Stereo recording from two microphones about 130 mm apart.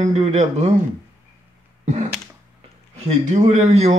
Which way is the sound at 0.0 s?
60° right (ahead or behind).